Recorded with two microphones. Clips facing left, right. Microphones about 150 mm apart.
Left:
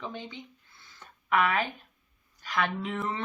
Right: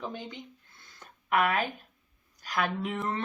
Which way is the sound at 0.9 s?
45° right (ahead or behind).